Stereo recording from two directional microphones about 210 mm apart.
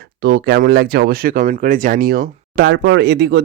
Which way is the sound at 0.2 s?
50° right (ahead or behind).